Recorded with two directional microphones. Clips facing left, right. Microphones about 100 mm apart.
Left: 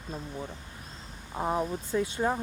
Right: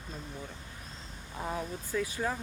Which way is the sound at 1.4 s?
30° left (ahead or behind).